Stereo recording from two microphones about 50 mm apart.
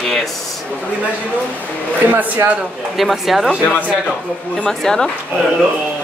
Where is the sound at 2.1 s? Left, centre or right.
Right.